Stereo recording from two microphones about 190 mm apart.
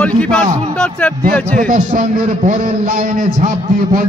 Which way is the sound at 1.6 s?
45° right (ahead or behind).